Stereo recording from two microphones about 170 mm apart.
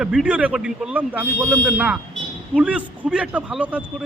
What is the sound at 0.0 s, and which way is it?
Speech, 5° right (ahead or behind).